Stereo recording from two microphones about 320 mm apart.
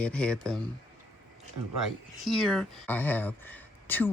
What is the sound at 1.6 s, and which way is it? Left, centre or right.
Speech, right.